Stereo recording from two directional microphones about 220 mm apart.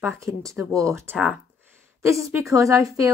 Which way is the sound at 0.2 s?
15° right (ahead or behind).